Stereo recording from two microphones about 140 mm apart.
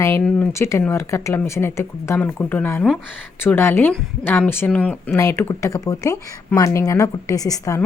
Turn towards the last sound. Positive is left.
turn(degrees=25)  # may be behind; listen again after turning